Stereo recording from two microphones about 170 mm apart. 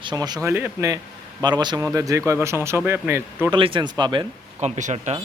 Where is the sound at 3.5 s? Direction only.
30° right (ahead or behind).